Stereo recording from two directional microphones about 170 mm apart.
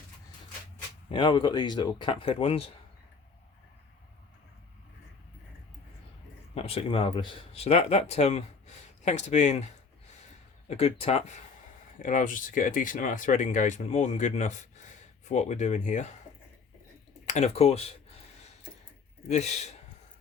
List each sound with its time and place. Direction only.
1.1 s speech: 30° left (ahead or behind)
6.5 s speech: 35° left (ahead or behind)
10.7 s speech: 35° left (ahead or behind)
12.0 s speech: 50° left (ahead or behind)
17.2 s speech: 40° left (ahead or behind)
19.3 s speech: 40° left (ahead or behind)